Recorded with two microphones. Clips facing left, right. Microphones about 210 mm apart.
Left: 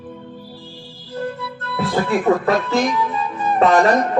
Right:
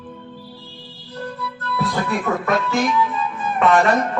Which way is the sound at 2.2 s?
35° left (ahead or behind).